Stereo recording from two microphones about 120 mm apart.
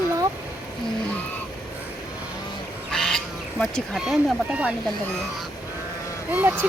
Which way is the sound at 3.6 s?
Centre (ahead or behind).